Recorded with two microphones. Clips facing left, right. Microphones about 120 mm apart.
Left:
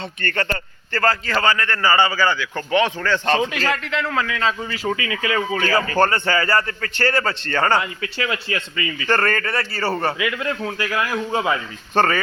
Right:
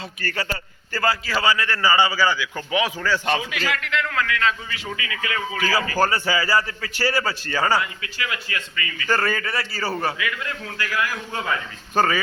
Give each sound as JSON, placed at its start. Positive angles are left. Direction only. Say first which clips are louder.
{"t": 0.2, "sound": "a man's voice", "louder": "left 4 dB", "side_deg": -5}
{"t": 3.4, "sound": "a man's voice", "louder": "left 5 dB", "side_deg": 35}
{"t": 6.0, "sound": "a man's voice", "louder": "left 2 dB", "side_deg": -5}
{"t": 8.0, "sound": "speech", "louder": "left 5 dB", "side_deg": 30}
{"t": 9.0, "sound": "a man's voice", "louder": "left 2 dB", "side_deg": -5}
{"t": 10.2, "sound": "speech", "louder": "left 6 dB", "side_deg": 20}
{"t": 11.9, "sound": "a man's voice", "louder": "left 2 dB", "side_deg": -5}